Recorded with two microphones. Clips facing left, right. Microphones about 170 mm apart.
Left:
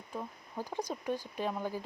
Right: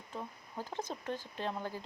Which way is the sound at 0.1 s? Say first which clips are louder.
Left 3 dB; 10° left (ahead or behind).